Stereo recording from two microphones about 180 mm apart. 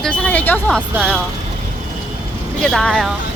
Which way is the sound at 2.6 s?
Centre (ahead or behind).